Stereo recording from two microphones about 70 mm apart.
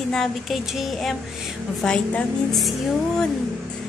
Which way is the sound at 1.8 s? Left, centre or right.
Centre.